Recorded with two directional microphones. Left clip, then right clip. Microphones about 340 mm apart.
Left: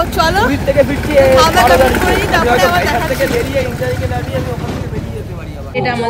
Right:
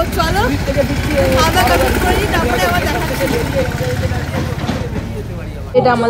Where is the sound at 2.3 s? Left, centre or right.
Centre.